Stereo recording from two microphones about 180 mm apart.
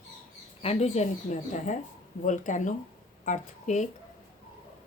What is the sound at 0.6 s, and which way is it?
Speech, 35° left (ahead or behind).